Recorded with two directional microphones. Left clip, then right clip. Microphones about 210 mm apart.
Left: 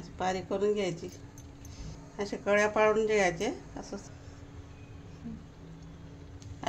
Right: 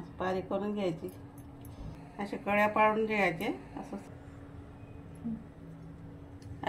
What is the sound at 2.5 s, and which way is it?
Speech, 50° left (ahead or behind).